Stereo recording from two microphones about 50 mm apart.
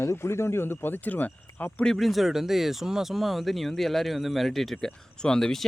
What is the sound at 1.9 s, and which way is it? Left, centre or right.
Speech, centre.